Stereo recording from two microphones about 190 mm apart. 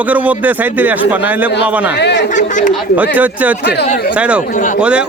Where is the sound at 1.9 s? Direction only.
65° left (ahead or behind).